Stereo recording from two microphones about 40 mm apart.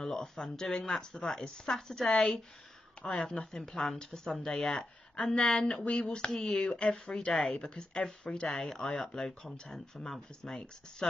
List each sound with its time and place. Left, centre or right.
0.0 s speech: centre
1.2 s speech: centre
1.7 s speech: centre
5.1 s speech: left
8.5 s speech: centre